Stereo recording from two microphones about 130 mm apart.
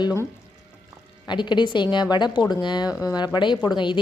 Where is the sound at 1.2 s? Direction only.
35° left (ahead or behind).